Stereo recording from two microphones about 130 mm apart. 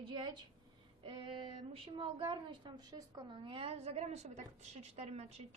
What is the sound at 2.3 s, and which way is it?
A woman's voice, 35° right (ahead or behind).